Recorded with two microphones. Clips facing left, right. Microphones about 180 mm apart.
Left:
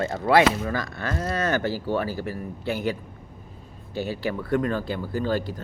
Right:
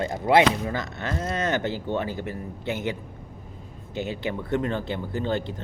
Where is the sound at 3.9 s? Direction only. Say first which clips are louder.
Left 1 dB; 20° right (ahead or behind).